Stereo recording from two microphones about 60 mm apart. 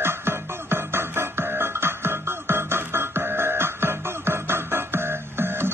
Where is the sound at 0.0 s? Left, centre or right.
Right.